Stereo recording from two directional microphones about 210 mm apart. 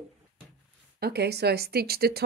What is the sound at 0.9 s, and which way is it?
Speech, 50° right (ahead or behind).